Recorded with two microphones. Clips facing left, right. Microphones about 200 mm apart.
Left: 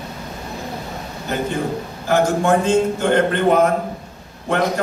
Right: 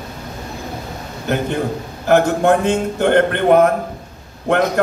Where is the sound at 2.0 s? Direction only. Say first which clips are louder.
Right 4 dB; 60° right (ahead or behind).